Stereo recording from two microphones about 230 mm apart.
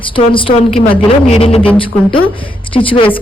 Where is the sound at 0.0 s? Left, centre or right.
Left.